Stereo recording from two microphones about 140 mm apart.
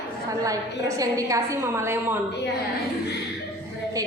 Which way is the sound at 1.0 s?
25° right (ahead or behind).